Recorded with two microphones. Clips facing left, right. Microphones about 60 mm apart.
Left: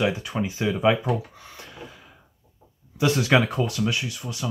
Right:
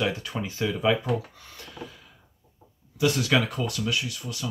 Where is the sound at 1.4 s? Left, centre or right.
Centre.